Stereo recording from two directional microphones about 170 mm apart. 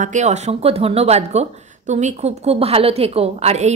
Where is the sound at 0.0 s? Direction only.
45° right (ahead or behind).